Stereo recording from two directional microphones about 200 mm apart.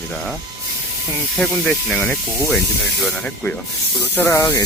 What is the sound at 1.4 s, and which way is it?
Speech, 5° left (ahead or behind).